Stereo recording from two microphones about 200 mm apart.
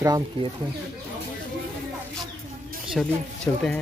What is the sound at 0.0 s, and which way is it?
Speech, 20° right (ahead or behind).